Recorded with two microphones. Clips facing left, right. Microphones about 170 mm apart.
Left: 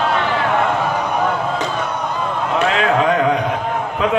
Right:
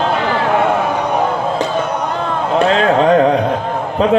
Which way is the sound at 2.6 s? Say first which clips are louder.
Right 4 dB; 35° right (ahead or behind).